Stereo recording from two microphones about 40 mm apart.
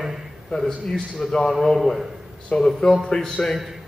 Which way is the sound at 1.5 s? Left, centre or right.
Centre.